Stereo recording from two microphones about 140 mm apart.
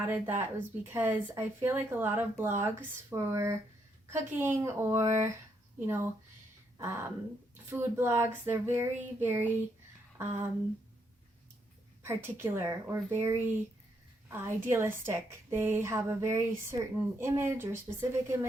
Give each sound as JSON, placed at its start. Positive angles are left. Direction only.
{"t": 0.1, "sound": "a woman's voice", "side_deg": -15}
{"t": 10.2, "sound": "a sound", "side_deg": -15}
{"t": 12.0, "sound": "a woman's voice", "side_deg": -15}